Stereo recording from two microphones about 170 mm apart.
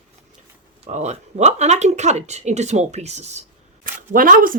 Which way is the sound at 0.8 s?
40° right (ahead or behind).